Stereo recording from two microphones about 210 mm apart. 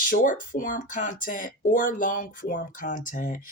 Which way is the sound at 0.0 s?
40° left (ahead or behind).